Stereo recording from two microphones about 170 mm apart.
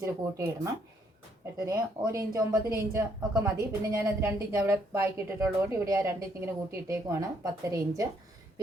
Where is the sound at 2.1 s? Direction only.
20° right (ahead or behind).